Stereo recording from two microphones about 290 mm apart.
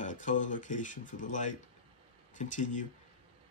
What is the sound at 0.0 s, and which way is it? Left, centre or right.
Speech, left.